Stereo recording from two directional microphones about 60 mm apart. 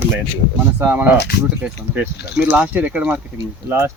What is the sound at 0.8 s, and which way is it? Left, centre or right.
Speech, right.